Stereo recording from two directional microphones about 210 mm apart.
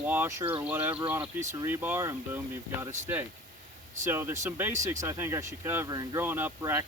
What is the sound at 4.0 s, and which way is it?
Speech, 10° right (ahead or behind).